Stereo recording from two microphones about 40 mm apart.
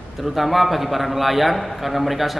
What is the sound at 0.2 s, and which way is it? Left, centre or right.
A man's voice, centre.